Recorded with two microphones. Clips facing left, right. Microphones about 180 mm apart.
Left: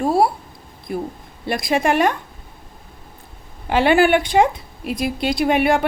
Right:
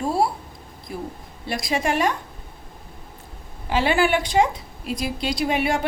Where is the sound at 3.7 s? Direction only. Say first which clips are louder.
Left 5 dB; 60° left (ahead or behind).